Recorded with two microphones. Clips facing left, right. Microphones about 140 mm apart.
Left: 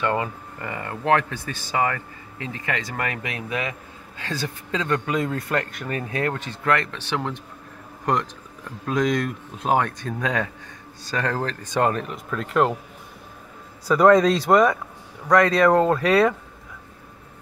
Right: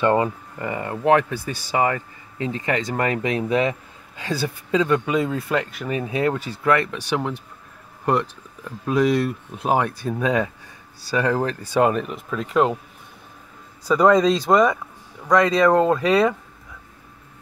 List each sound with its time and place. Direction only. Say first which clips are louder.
0.0 s speech: right 5 dB; 25° right (ahead or behind)
4.2 s speech: right 4 dB; 15° right (ahead or behind)
13.8 s speech: even; centre (ahead or behind)